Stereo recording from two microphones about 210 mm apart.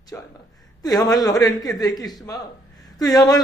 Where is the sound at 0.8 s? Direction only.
20° left (ahead or behind).